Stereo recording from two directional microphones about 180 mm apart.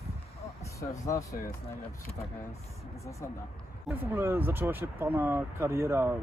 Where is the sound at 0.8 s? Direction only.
15° left (ahead or behind).